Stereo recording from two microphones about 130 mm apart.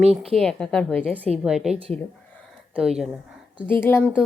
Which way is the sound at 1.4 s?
5° right (ahead or behind).